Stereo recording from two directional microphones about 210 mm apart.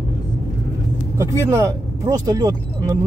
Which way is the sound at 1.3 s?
15° right (ahead or behind).